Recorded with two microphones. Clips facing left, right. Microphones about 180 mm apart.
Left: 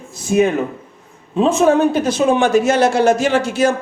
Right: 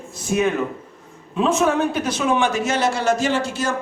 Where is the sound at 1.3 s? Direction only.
30° left (ahead or behind).